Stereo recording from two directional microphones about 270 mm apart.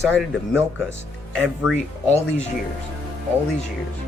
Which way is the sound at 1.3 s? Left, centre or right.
Centre.